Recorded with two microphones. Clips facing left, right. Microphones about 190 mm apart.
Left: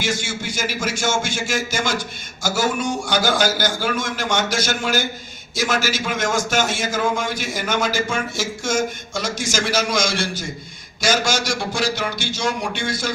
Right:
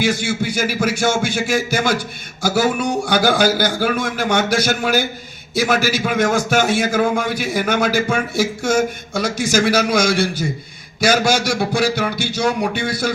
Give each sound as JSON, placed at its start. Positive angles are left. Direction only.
{"t": 0.0, "sound": "a man's voice", "side_deg": -60}